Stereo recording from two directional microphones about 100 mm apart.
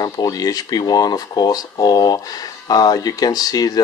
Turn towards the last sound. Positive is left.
turn(degrees=40)  # may be behind; listen again after turning